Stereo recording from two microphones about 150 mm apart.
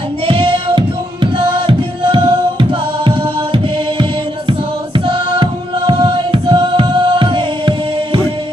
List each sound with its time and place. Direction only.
0.3 s music: 35° right (ahead or behind)